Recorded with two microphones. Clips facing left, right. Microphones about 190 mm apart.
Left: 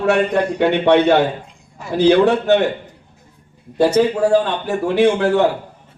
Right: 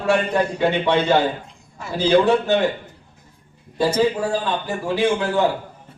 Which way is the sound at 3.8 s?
65° left (ahead or behind).